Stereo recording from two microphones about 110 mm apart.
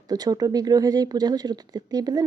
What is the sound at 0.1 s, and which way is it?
Speech, 35° right (ahead or behind).